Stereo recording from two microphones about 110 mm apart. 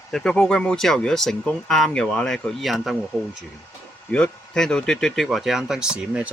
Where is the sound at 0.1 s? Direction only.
5° left (ahead or behind).